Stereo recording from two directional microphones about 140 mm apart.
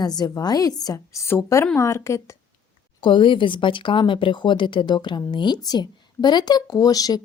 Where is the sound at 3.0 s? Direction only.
35° left (ahead or behind).